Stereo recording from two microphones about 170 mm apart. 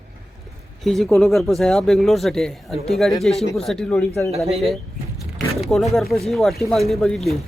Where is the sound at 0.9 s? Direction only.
Centre (ahead or behind).